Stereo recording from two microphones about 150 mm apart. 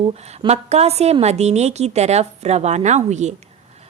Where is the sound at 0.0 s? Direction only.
45° right (ahead or behind).